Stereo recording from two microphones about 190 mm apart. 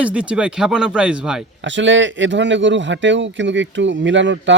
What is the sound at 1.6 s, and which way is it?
Speech, 75° right (ahead or behind).